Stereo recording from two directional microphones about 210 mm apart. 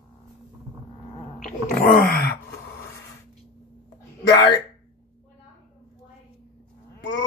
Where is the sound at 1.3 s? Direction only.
5° left (ahead or behind).